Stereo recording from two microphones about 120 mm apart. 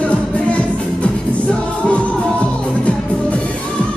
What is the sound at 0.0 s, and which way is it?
Music, 10° left (ahead or behind).